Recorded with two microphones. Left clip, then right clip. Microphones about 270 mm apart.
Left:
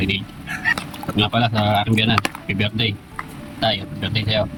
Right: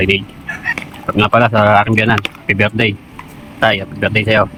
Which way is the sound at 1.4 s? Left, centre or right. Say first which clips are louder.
Right 11 dB; right.